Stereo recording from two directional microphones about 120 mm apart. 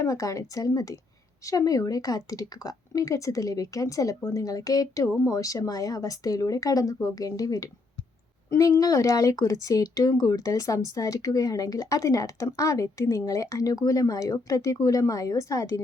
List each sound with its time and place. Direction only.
0.0 s speech: 25° left (ahead or behind)